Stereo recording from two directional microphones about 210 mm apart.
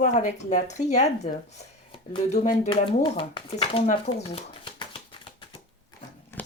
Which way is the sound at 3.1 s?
25° left (ahead or behind).